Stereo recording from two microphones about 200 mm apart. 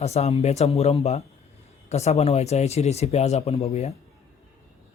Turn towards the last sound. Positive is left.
turn(degrees=30)  # may be behind; listen again after turning